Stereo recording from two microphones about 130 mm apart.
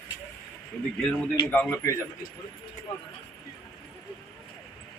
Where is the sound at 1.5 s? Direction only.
15° left (ahead or behind).